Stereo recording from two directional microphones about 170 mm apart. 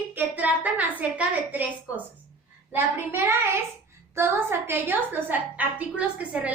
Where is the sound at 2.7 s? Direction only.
15° right (ahead or behind).